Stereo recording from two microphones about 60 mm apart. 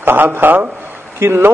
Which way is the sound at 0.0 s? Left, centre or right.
Right.